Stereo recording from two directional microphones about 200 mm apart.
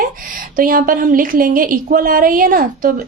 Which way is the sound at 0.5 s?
45° right (ahead or behind).